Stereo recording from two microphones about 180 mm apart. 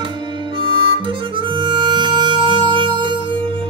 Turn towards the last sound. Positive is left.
turn(degrees=-25)  # may be behind; listen again after turning